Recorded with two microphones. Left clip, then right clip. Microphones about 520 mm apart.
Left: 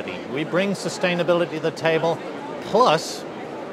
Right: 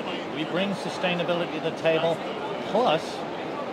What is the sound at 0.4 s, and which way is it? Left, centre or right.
Speech, left.